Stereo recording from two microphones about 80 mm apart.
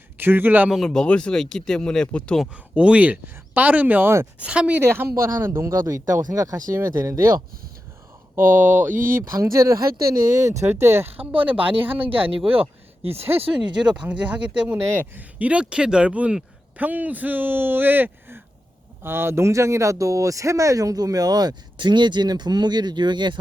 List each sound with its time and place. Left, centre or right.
0.2 s speech: right
0.9 s speech: centre
2.7 s speech: centre
4.8 s speech: right
5.7 s speech: right
8.4 s speech: right
11.3 s speech: centre
13.6 s speech: right
13.9 s speech: centre
14.7 s speech: right